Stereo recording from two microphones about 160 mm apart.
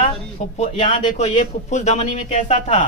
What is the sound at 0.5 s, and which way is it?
A man's voice, 45° left (ahead or behind).